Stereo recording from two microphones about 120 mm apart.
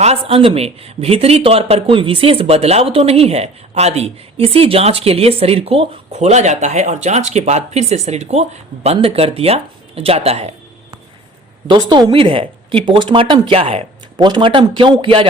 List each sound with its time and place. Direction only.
0.0 s speech: 55° right (ahead or behind)
11.7 s speech: 40° right (ahead or behind)
14.2 s speech: 40° right (ahead or behind)